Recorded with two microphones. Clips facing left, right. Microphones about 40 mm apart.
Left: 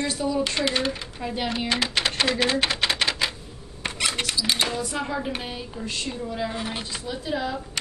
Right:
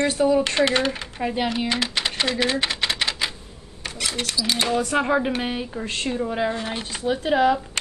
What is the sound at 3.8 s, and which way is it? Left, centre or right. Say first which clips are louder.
Camera: left 1 dB; left.